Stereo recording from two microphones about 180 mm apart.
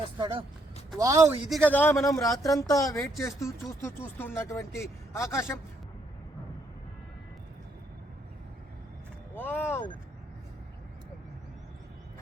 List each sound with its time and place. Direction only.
0.2 s a man's voice: 25° right (ahead or behind)
1.5 s speech: 5° left (ahead or behind)
9.3 s speech: 10° left (ahead or behind)